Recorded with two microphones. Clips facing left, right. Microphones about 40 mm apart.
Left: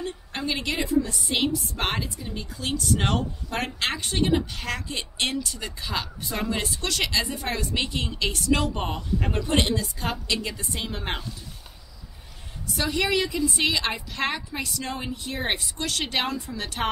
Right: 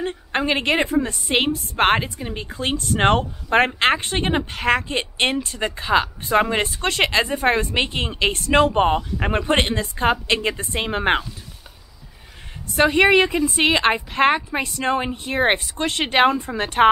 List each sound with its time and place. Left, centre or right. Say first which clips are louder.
0.0 s a woman's voice: right 8 dB; right
12.7 s a woman's voice: right 10 dB; right